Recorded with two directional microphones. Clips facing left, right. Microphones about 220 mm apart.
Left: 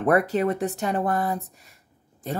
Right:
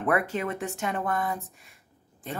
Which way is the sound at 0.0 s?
40° left (ahead or behind).